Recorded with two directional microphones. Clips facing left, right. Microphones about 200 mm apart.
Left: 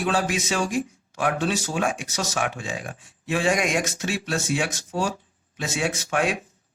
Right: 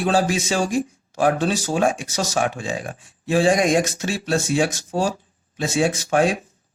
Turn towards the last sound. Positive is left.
turn(degrees=-35)  # may be behind; listen again after turning